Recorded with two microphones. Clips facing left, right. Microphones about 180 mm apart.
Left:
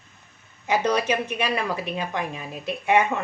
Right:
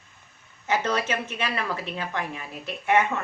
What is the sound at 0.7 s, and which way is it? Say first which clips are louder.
A woman's voice: left 3 dB; 15° left (ahead or behind).